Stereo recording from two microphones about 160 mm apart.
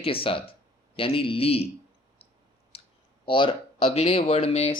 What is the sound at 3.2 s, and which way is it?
Speech, 30° left (ahead or behind).